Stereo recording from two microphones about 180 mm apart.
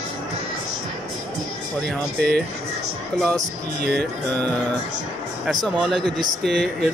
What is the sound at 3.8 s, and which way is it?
Speech, 65° right (ahead or behind).